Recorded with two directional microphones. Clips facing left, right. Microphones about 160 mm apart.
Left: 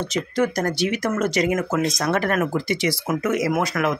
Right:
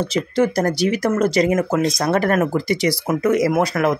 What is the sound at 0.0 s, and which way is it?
Speech, 30° right (ahead or behind).